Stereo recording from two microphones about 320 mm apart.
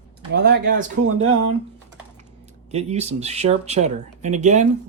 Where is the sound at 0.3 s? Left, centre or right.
Right.